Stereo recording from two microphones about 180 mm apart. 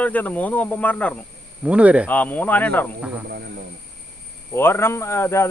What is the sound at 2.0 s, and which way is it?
Speech, 10° left (ahead or behind).